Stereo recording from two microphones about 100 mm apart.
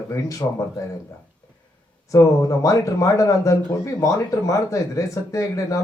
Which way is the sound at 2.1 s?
35° left (ahead or behind).